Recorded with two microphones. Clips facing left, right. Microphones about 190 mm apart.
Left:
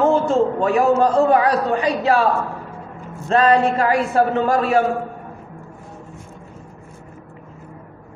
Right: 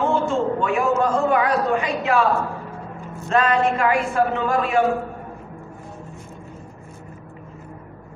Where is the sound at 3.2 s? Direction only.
35° left (ahead or behind).